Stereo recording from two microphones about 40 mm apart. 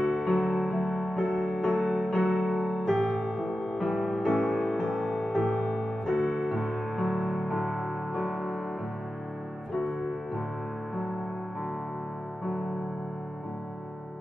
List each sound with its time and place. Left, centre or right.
0.0 s music: centre
3.3 s music: centre
3.7 s music: centre
4.7 s piano: centre
6.5 s music: centre
7.0 s music: centre
9.8 s music: centre